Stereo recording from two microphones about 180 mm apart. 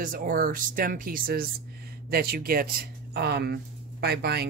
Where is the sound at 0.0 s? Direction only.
50° right (ahead or behind).